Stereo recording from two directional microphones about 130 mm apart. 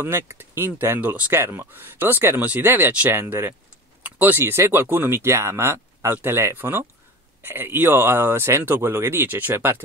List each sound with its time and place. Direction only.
0.0 s speech: 20° right (ahead or behind)